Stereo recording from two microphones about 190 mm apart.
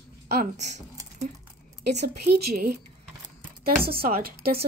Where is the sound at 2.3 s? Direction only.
50° right (ahead or behind).